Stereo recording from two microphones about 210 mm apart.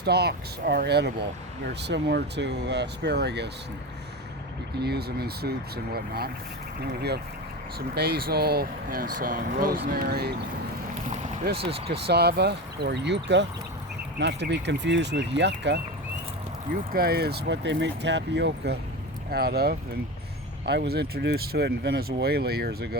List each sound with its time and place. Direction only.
0.0 s speech: 50° right (ahead or behind)
4.8 s speech: 50° right (ahead or behind)
11.0 s a sound: 35° right (ahead or behind)
12.0 s speech: 50° right (ahead or behind)
16.9 s speech: 45° right (ahead or behind)